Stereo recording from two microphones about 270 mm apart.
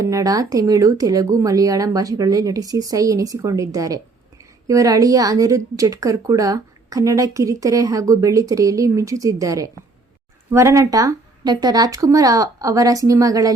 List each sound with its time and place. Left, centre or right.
0.0 s speech: centre